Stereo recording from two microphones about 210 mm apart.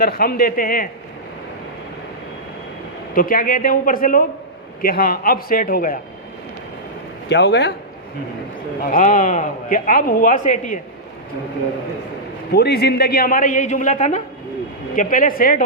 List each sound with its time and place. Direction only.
0.0 s a man's voice: 45° left (ahead or behind)
3.2 s a man's voice: 40° left (ahead or behind)
7.3 s speech: 55° left (ahead or behind)
8.9 s speech: 40° left (ahead or behind)
12.5 s speech: 50° left (ahead or behind)